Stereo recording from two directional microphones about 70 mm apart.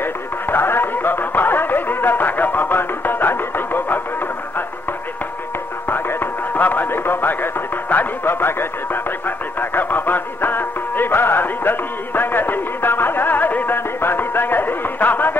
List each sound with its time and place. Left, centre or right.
0.0 s music: left
5.9 s music: left